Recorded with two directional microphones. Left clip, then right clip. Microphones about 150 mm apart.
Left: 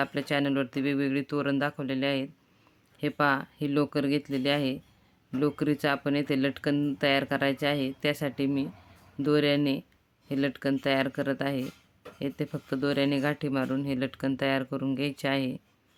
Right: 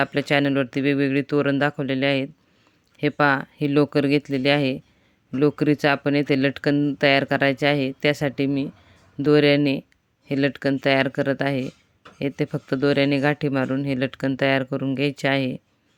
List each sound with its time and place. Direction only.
0.0 s speech: 35° right (ahead or behind)